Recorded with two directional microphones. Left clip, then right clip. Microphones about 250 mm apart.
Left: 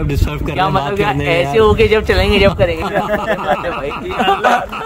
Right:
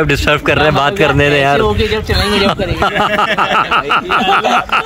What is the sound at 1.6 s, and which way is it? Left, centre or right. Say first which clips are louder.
Speech: left 3 dB; left.